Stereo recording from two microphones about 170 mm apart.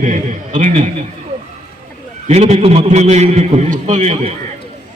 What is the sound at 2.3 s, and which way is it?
A man's voice, 40° right (ahead or behind).